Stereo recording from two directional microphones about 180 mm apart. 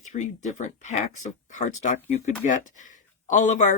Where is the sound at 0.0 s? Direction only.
40° left (ahead or behind).